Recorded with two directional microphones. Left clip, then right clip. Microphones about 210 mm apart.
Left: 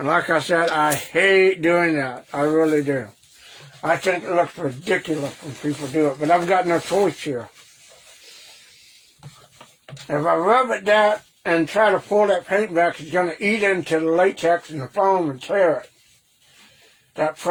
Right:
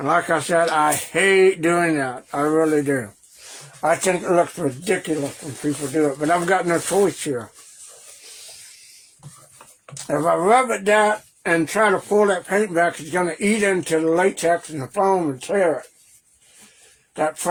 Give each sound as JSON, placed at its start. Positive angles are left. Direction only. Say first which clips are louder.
{"t": 0.0, "sound": "speech", "louder": "even", "side_deg": -10}
{"t": 3.8, "sound": "speech", "louder": "right 1 dB", "side_deg": -50}
{"t": 5.9, "sound": "speech", "louder": "left 2 dB", "side_deg": -30}
{"t": 10.1, "sound": "speech", "louder": "right 1 dB", "side_deg": -40}
{"t": 17.2, "sound": "speech", "louder": "even", "side_deg": -40}